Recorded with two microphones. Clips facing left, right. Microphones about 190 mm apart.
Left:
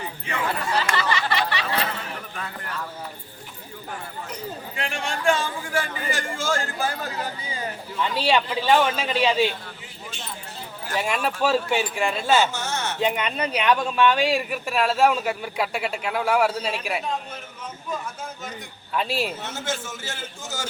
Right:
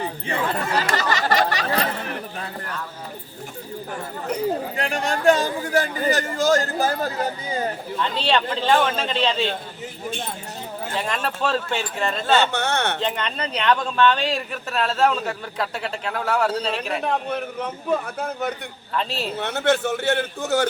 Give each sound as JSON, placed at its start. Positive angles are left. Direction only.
{"t": 0.0, "sound": "a sound", "side_deg": -35}
{"t": 4.8, "sound": "a man's voice", "side_deg": -40}
{"t": 7.9, "sound": "speech", "side_deg": 10}
{"t": 11.0, "sound": "speech", "side_deg": 10}
{"t": 12.4, "sound": "a man's voice", "side_deg": -65}
{"t": 13.0, "sound": "speech", "side_deg": 10}
{"t": 17.0, "sound": "a man's voice", "side_deg": -60}
{"t": 18.9, "sound": "speech", "side_deg": 10}
{"t": 19.4, "sound": "a man's voice", "side_deg": -65}